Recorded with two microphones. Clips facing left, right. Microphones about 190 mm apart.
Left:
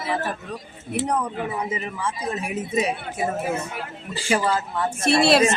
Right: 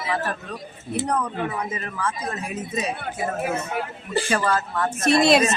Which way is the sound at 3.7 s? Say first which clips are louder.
Right 6 dB; 60° right (ahead or behind).